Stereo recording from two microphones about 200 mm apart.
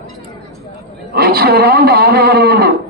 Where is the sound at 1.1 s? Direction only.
50° right (ahead or behind).